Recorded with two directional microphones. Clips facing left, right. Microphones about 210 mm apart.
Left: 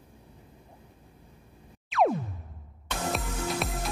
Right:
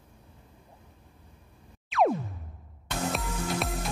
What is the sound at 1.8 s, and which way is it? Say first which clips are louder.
Music: even; centre (ahead or behind).